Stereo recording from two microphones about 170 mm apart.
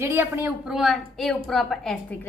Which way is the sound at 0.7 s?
Centre (ahead or behind).